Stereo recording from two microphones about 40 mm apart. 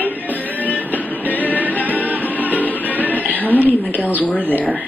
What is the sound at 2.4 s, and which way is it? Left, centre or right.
Music, left.